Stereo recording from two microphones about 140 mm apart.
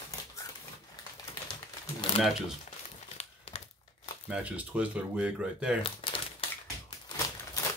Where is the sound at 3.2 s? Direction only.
45° left (ahead or behind).